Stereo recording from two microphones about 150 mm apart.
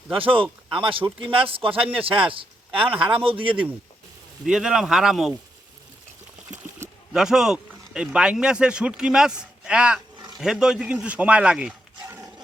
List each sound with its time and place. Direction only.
0.2 s a man's voice: 35° right (ahead or behind)
4.4 s speech: 5° right (ahead or behind)
6.5 s speech: 5° right (ahead or behind)
12.0 s dog: 20° right (ahead or behind)